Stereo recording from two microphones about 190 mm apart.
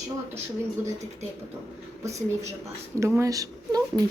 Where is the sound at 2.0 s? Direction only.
15° right (ahead or behind).